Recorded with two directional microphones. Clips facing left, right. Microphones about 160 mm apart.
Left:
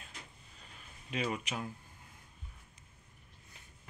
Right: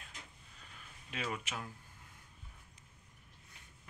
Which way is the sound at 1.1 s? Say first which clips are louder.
Left 5 dB; 15° left (ahead or behind).